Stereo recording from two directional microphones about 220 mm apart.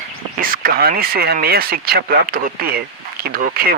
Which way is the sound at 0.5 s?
45° right (ahead or behind).